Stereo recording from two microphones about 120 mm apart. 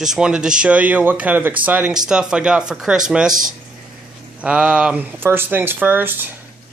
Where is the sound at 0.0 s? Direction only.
5° right (ahead or behind).